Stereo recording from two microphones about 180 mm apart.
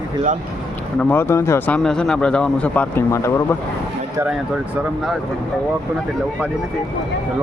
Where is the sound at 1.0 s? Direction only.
10° left (ahead or behind).